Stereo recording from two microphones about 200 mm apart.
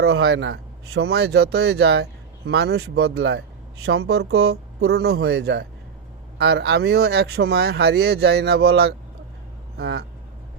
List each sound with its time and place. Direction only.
0.0 s a man's voice: 60° right (ahead or behind)